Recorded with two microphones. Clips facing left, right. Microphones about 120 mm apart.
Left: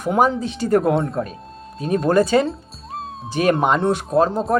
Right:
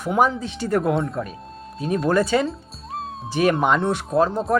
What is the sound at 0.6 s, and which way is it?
Speech, 40° left (ahead or behind).